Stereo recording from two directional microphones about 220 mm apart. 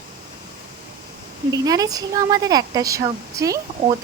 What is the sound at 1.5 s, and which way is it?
Speech, 15° right (ahead or behind).